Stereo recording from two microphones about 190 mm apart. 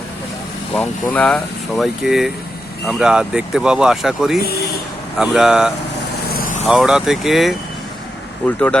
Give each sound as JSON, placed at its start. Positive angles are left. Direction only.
{"t": 0.7, "sound": "speech", "side_deg": 5}
{"t": 6.2, "sound": "vehicle", "side_deg": 50}
{"t": 6.7, "sound": "speech", "side_deg": -5}